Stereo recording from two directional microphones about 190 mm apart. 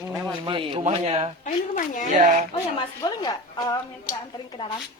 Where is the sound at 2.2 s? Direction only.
40° right (ahead or behind).